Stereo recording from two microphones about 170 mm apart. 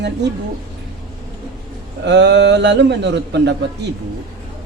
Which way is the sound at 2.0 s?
90° right.